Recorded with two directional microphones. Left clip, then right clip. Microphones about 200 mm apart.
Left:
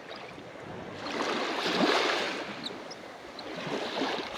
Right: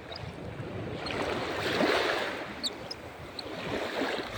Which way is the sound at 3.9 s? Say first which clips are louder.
Even; 20° left (ahead or behind).